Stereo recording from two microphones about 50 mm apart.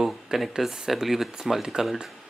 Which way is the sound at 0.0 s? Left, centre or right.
Centre.